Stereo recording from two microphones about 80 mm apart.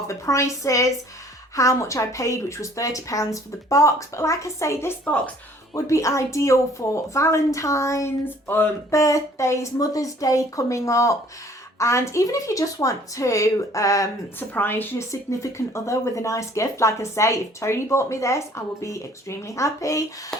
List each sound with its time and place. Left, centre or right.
0.1 s speech: left
8.2 s a woman's voice: left
8.9 s speech: left
14.3 s a woman's voice: left
15.1 s speech: left